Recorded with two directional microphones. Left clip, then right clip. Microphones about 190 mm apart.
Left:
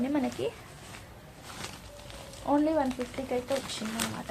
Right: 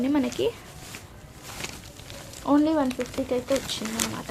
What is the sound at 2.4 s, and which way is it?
Speech, 40° right (ahead or behind).